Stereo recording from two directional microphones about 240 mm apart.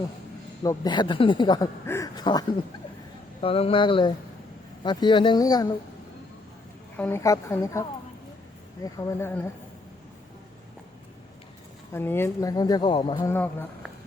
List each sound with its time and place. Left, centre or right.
0.6 s speech: centre
6.9 s speech: centre
11.9 s speech: centre
13.3 s speech: centre